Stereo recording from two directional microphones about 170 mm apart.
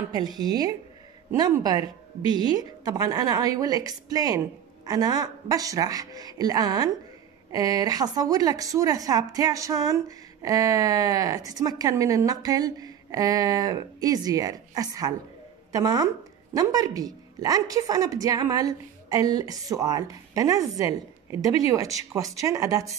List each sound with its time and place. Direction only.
0.1 s a woman's voice: 25° right (ahead or behind)